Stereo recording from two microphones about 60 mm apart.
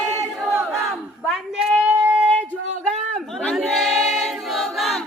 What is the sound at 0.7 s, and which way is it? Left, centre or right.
Battle cry, centre.